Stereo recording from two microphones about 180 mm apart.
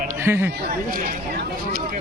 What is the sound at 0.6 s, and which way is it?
Speech, 50° right (ahead or behind).